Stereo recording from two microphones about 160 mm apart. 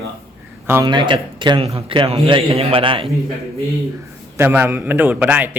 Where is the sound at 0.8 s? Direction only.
30° right (ahead or behind).